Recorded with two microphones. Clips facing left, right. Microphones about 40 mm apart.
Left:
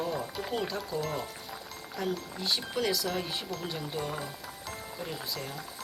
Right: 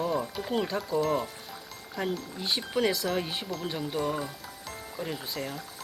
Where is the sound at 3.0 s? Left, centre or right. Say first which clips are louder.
Right 3 dB; centre.